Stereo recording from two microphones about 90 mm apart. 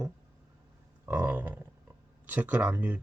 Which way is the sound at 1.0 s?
20° right (ahead or behind).